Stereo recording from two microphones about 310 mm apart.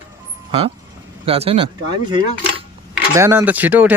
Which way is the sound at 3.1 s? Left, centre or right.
Centre.